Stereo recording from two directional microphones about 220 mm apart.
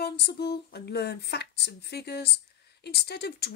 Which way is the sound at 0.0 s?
45° left (ahead or behind).